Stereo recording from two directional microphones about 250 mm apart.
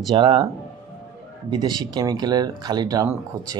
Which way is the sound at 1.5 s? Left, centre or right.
Centre.